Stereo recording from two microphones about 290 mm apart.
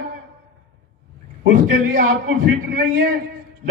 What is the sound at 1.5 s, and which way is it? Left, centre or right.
A man's voice, right.